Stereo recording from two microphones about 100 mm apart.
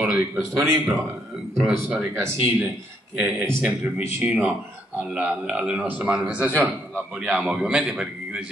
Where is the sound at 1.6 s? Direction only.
10° right (ahead or behind).